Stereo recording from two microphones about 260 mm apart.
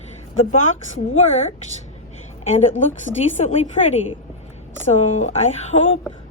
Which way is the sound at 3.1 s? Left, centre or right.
Left.